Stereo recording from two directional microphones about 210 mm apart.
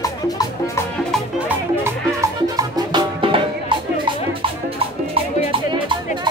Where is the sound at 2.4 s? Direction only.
15° right (ahead or behind).